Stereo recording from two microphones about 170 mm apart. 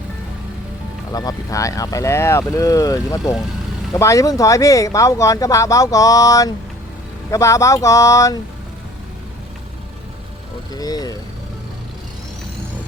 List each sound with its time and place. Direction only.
1.1 s speech: 25° left (ahead or behind)
10.7 s speech: 20° left (ahead or behind)